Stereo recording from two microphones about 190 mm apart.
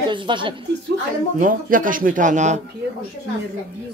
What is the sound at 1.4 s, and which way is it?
Speech, 45° right (ahead or behind).